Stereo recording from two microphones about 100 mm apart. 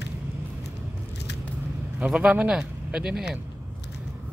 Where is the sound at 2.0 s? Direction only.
10° right (ahead or behind).